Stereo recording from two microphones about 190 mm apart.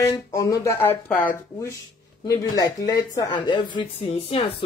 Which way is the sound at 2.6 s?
20° left (ahead or behind).